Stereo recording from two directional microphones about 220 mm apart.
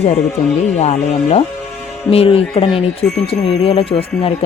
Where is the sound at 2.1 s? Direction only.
25° left (ahead or behind).